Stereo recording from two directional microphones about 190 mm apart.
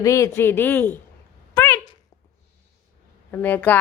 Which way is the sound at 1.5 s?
15° left (ahead or behind).